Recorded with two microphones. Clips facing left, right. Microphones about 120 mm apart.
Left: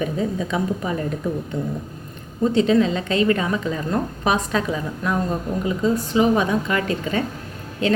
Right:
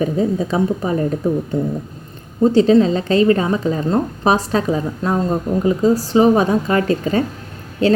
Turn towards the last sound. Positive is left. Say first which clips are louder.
# right 5 dB
turn(degrees=-35)  # may be behind; listen again after turning